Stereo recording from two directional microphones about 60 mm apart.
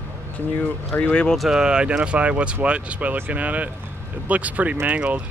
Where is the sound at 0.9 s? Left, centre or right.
Left.